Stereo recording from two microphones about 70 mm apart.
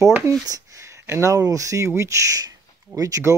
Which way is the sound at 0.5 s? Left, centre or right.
Right.